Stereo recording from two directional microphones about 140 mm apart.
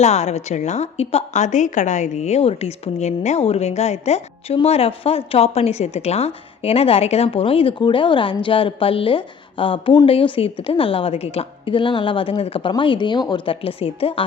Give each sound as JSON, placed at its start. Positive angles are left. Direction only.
{"t": 0.0, "sound": "a woman's voice", "side_deg": 50}